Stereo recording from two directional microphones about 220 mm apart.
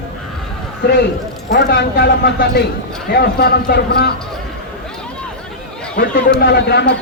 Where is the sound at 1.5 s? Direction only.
50° left (ahead or behind).